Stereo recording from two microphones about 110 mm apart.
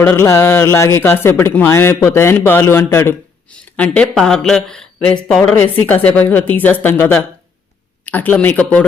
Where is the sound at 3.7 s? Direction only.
10° left (ahead or behind).